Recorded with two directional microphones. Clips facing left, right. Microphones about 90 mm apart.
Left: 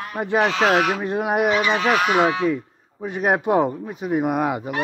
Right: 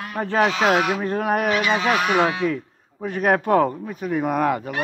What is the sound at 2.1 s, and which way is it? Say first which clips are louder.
Fowl: left 1 dB; 10° left (ahead or behind).